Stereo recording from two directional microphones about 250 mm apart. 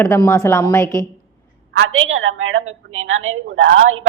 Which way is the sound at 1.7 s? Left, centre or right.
Right.